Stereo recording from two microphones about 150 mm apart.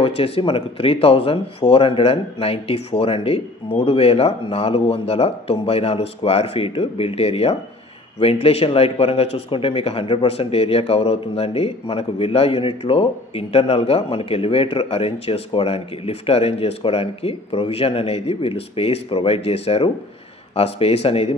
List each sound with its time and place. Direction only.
0.0 s speech: 40° left (ahead or behind)